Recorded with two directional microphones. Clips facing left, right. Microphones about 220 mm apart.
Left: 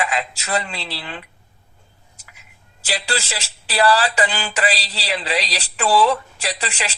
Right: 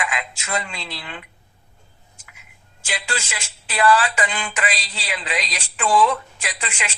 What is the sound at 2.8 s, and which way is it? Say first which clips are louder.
Speech: left 4 dB; 35° left (ahead or behind).